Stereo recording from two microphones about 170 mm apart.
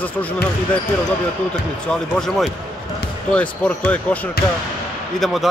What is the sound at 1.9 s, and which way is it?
Speech, centre (ahead or behind).